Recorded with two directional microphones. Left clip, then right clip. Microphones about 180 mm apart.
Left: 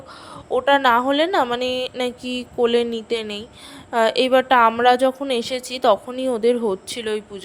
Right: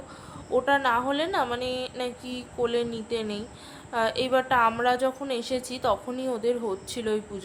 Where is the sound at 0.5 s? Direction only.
35° left (ahead or behind).